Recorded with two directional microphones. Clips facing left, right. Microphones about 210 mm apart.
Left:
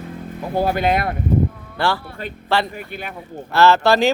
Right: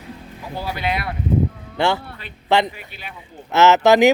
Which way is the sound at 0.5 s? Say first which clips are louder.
Left 7 dB; 50° left (ahead or behind).